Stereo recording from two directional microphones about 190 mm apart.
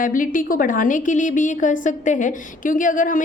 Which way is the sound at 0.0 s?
45° left (ahead or behind).